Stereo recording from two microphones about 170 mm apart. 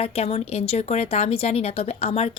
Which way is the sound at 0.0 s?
35° left (ahead or behind).